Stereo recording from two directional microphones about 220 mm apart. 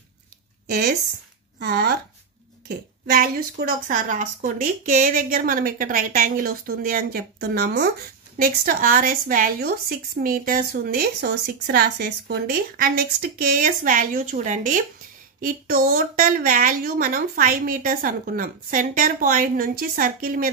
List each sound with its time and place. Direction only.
0.7 s a woman's voice: 45° right (ahead or behind)